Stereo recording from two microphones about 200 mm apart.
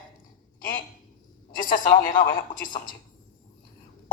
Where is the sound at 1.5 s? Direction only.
45° left (ahead or behind).